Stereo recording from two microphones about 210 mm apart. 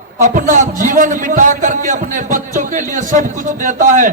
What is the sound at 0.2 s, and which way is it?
A man's voice, 40° right (ahead or behind).